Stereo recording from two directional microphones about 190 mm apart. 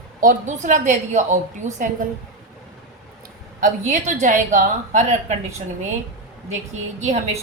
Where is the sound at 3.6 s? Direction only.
40° right (ahead or behind).